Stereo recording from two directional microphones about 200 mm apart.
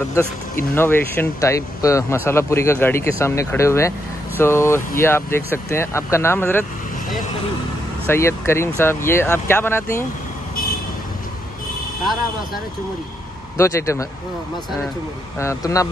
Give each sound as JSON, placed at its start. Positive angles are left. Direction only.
{"t": 0.7, "sound": "speech", "side_deg": 10}
{"t": 8.1, "sound": "speech", "side_deg": 15}
{"t": 13.6, "sound": "speech", "side_deg": 15}
{"t": 15.3, "sound": "speech", "side_deg": 15}